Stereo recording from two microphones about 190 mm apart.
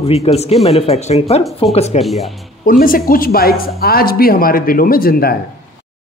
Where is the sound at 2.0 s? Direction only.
Centre (ahead or behind).